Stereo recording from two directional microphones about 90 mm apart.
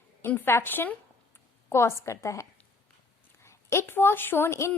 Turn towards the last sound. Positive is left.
turn(degrees=30)  # may be behind; listen again after turning